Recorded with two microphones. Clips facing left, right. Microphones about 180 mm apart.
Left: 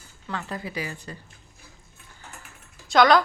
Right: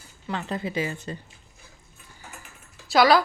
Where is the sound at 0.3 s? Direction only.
20° right (ahead or behind).